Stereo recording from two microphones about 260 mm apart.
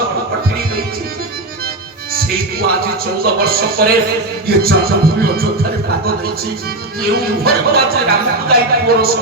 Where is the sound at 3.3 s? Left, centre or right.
Right.